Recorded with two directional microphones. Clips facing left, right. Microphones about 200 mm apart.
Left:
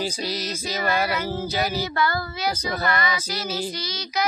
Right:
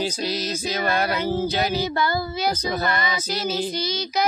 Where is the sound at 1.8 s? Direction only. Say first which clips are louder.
Right 2 dB; 20° right (ahead or behind).